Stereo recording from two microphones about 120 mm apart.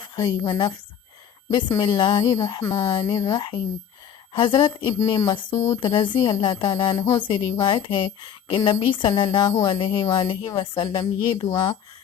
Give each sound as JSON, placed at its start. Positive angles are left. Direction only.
{"t": 0.2, "sound": "speech", "side_deg": 35}
{"t": 1.8, "sound": "speech", "side_deg": 35}